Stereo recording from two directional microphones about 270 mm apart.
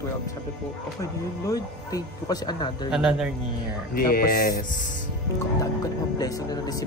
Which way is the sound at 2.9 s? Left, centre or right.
Centre.